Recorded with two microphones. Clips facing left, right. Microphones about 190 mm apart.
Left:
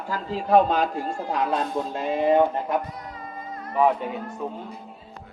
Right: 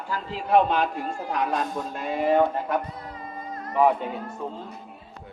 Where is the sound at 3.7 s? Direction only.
5° left (ahead or behind).